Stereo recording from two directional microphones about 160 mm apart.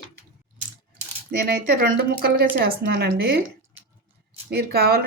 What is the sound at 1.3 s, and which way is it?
Speech, 75° right (ahead or behind).